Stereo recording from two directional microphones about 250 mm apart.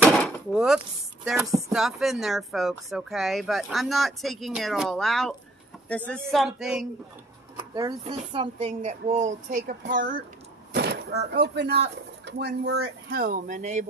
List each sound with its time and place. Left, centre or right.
0.0 s chopping: centre
1.2 s speech: centre
7.7 s speech: centre
9.6 s speech: right
13.1 s speech: right